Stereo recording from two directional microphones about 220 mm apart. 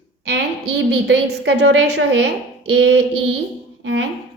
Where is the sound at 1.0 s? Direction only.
50° right (ahead or behind).